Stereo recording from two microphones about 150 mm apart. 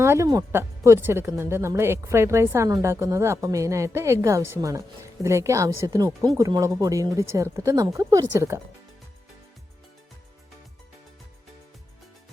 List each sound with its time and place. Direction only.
0.0 s speech: 20° right (ahead or behind)